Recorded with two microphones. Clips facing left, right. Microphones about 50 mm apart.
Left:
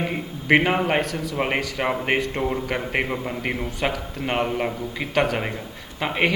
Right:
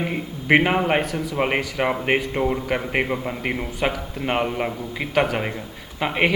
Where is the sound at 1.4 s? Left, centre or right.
Centre.